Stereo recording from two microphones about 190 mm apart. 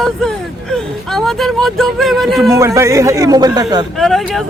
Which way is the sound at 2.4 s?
15° right (ahead or behind).